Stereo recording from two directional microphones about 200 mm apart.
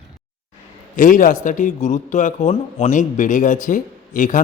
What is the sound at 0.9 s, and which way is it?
Speech, 40° left (ahead or behind).